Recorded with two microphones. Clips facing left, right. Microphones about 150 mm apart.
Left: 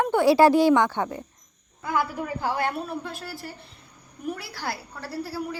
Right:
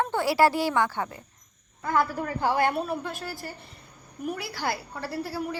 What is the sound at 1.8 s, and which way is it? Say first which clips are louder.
A woman's voice: right 1 dB; 5° left (ahead or behind).